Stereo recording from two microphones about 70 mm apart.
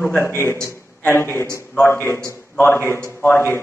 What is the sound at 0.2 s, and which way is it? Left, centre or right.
A man's voice, left.